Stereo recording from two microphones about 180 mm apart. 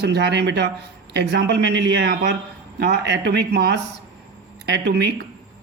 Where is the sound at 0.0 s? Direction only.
70° right (ahead or behind).